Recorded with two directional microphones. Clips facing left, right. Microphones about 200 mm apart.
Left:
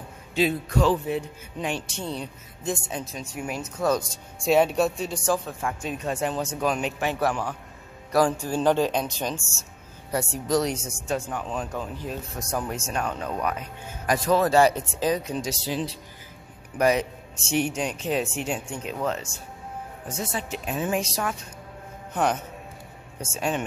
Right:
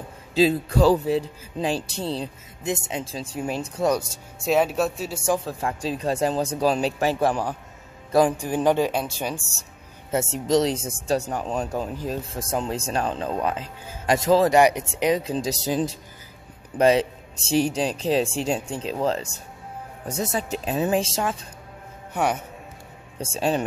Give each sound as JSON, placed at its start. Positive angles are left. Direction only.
{"t": 0.4, "sound": "speech", "side_deg": -30}
{"t": 2.6, "sound": "speech", "side_deg": -20}
{"t": 4.5, "sound": "speech", "side_deg": 0}
{"t": 5.5, "sound": "speech", "side_deg": -35}
{"t": 8.1, "sound": "speech", "side_deg": -20}
{"t": 10.1, "sound": "speech", "side_deg": -20}
{"t": 11.1, "sound": "speech", "side_deg": -40}
{"t": 15.3, "sound": "speech", "side_deg": -40}
{"t": 16.7, "sound": "speech", "side_deg": -30}
{"t": 22.1, "sound": "a man's voice", "side_deg": -10}
{"t": 23.3, "sound": "speech", "side_deg": -30}